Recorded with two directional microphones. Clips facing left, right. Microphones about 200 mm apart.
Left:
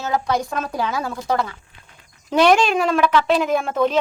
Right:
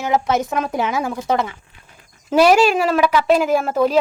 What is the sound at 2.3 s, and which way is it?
Speech, 5° right (ahead or behind).